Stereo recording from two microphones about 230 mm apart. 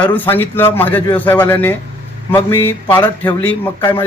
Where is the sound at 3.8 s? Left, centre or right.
Centre.